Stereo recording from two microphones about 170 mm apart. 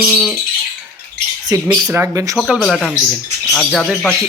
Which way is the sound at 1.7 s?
20° right (ahead or behind).